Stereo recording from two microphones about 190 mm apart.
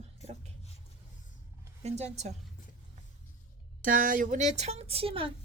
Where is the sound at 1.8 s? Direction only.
35° right (ahead or behind).